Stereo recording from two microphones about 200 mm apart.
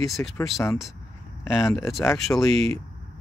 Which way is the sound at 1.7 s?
15° left (ahead or behind).